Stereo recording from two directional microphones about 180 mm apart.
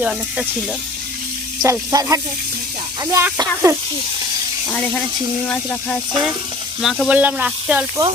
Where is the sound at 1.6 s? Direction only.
20° right (ahead or behind).